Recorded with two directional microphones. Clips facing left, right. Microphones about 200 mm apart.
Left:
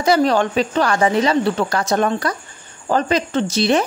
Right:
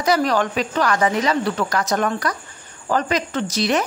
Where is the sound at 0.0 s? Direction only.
30° left (ahead or behind).